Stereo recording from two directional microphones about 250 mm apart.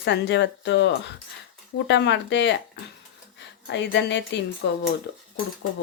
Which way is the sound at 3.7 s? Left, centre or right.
Left.